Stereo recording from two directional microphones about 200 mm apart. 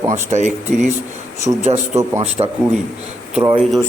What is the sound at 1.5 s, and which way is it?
A man's voice, 25° right (ahead or behind).